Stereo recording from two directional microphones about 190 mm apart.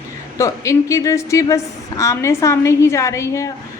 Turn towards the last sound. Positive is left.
turn(degrees=15)  # may be behind; listen again after turning